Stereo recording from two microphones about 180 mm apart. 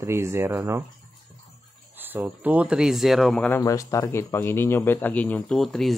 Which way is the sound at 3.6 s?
20° left (ahead or behind).